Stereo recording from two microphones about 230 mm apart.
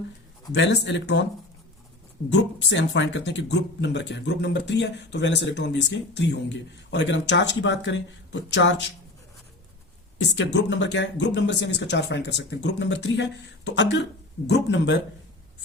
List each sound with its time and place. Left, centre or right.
0.5 s speech: left
2.3 s speech: left
10.3 s speech: left